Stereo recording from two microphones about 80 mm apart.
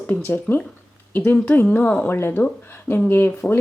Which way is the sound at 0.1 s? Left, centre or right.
Left.